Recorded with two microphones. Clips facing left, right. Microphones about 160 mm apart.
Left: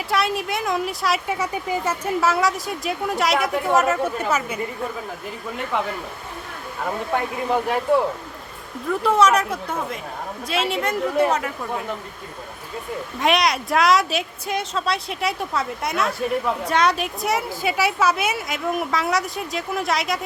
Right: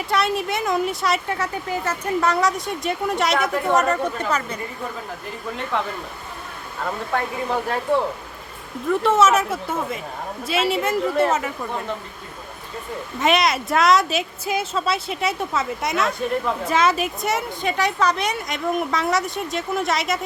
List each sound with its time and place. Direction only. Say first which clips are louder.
0.1 s speech: right 1 dB; centre (ahead or behind)
1.4 s speech: left 1 dB; 10° left (ahead or behind)
7.1 s speech: even; 20° left (ahead or behind)
8.9 s speech: right 1 dB; centre (ahead or behind)
13.1 s speech: right 1 dB; centre (ahead or behind)